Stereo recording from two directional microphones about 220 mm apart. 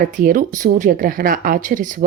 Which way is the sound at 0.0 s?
40° right (ahead or behind).